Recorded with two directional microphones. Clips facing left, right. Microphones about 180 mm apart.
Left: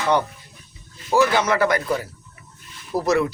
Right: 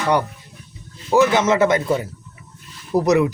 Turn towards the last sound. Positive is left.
turn(degrees=-20)  # may be behind; listen again after turning